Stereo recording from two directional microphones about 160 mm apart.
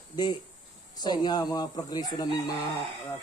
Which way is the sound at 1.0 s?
25° left (ahead or behind).